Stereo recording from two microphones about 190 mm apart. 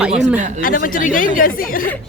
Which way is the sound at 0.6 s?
45° left (ahead or behind).